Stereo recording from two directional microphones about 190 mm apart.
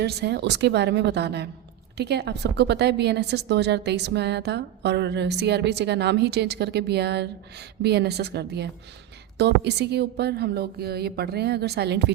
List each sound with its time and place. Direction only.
0.0 s a woman's voice: 60° right (ahead or behind)